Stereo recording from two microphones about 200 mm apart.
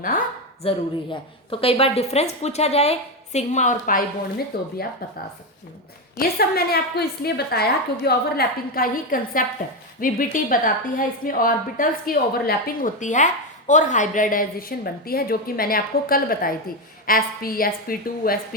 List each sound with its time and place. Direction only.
0.6 s a woman's voice: 25° left (ahead or behind)
4.5 s a woman's voice: 50° left (ahead or behind)
6.1 s a woman's voice: 50° left (ahead or behind)